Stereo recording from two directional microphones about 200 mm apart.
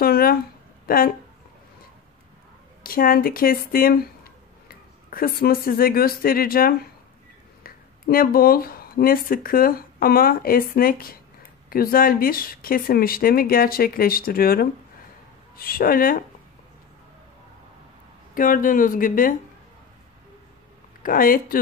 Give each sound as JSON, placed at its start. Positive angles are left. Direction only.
{"t": 0.0, "sound": "a sound", "side_deg": 50}
{"t": 0.8, "sound": "speech", "side_deg": 45}
{"t": 2.8, "sound": "speech", "side_deg": 45}
{"t": 18.3, "sound": "speech", "side_deg": 45}
{"t": 21.0, "sound": "speech", "side_deg": 45}